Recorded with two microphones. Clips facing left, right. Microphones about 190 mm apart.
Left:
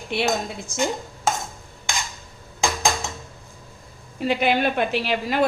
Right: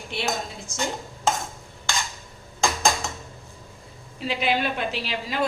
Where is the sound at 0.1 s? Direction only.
65° left (ahead or behind).